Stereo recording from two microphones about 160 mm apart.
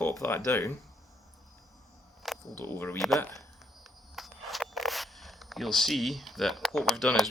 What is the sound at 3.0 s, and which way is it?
Speech, centre (ahead or behind).